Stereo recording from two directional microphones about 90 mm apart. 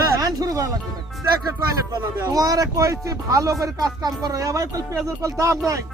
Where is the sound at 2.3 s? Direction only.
40° right (ahead or behind).